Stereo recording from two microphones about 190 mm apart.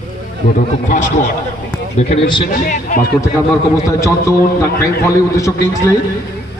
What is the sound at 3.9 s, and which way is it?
Speech, 15° left (ahead or behind).